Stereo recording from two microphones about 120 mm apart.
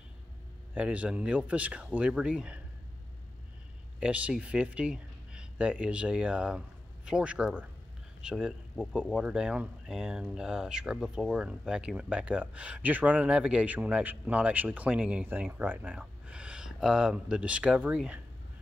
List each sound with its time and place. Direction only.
0.7 s speech: 10° right (ahead or behind)
4.0 s speech: 10° right (ahead or behind)